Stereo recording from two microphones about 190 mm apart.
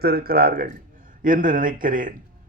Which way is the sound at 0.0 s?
55° right (ahead or behind).